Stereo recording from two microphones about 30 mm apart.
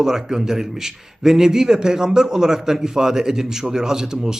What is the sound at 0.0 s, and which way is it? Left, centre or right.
A man's voice, centre.